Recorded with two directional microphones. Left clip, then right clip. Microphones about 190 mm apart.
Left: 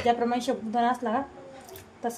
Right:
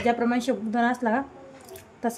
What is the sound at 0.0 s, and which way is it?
A woman's voice, 25° right (ahead or behind).